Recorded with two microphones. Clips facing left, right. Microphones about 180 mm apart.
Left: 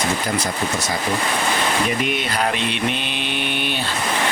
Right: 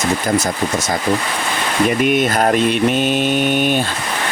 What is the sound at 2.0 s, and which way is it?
Speech, 50° right (ahead or behind).